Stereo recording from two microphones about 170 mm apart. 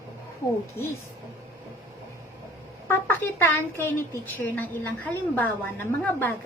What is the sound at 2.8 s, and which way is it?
A woman's voice, 10° left (ahead or behind).